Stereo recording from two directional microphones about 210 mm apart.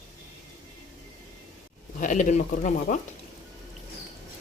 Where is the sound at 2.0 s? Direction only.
35° left (ahead or behind).